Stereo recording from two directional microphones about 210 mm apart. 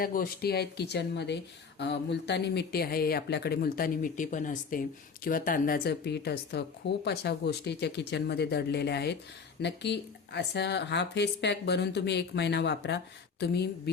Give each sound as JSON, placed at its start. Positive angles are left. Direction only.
{"t": 0.0, "sound": "speech", "side_deg": 45}